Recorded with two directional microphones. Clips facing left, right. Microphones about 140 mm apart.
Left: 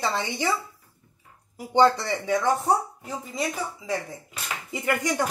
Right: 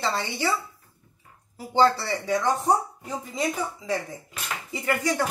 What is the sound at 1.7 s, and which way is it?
Speech, 15° left (ahead or behind).